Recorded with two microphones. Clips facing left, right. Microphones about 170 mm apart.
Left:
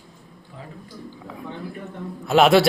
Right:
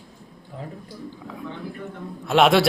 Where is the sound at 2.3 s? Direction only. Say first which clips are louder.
Left 2 dB; centre (ahead or behind).